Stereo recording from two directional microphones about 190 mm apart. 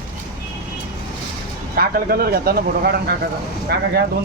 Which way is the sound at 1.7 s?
50° right (ahead or behind).